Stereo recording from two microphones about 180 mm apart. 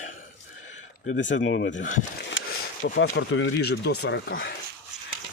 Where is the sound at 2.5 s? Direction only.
75° left (ahead or behind).